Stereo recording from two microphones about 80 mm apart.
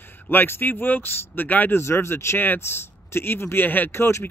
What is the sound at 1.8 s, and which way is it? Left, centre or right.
Speech, left.